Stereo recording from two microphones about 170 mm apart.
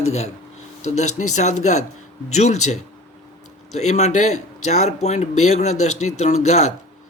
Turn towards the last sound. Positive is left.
turn(degrees=40)  # may be behind; listen again after turning